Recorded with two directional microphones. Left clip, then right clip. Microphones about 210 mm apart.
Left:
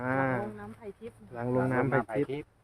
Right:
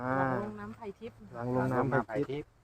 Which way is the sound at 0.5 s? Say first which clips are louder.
Right 1 dB; 50° right (ahead or behind).